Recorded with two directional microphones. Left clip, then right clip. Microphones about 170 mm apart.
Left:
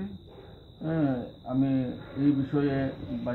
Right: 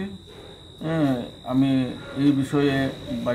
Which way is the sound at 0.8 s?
30° right (ahead or behind).